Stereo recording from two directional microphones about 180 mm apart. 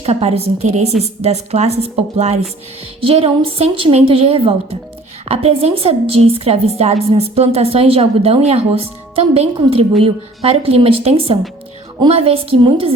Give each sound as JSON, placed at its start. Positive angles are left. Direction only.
{"t": 0.0, "sound": "a woman's voice", "side_deg": -35}